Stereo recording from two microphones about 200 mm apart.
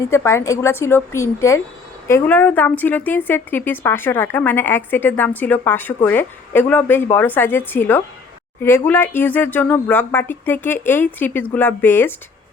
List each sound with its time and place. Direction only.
0.0 s a woman's voice: 15° left (ahead or behind)